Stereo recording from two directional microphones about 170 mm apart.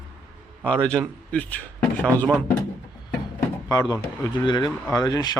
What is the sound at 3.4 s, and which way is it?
Speech, 20° left (ahead or behind).